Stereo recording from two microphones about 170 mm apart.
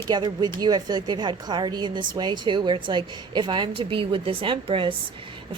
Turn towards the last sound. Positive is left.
turn(degrees=-30)  # may be behind; listen again after turning